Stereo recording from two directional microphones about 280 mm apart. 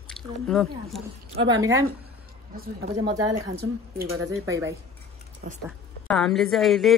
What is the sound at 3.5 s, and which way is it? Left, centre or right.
Speech, right.